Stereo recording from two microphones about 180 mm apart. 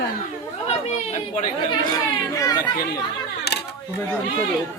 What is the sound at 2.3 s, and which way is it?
Chatter, 20° left (ahead or behind).